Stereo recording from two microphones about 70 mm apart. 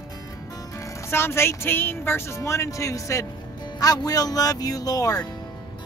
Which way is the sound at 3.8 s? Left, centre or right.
Left.